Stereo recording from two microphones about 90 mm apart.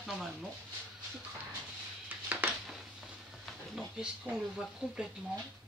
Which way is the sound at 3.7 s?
5° right (ahead or behind).